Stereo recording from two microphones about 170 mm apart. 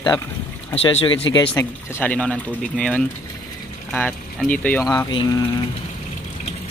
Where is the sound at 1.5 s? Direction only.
10° left (ahead or behind).